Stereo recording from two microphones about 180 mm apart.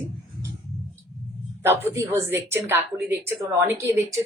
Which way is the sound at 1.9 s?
15° right (ahead or behind).